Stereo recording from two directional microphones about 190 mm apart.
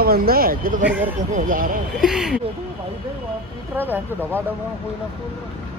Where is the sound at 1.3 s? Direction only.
45° right (ahead or behind).